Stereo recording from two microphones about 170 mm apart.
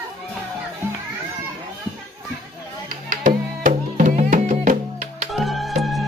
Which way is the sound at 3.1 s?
50° right (ahead or behind).